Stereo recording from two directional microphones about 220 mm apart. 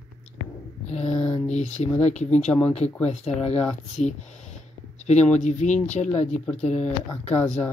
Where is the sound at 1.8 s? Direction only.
30° left (ahead or behind).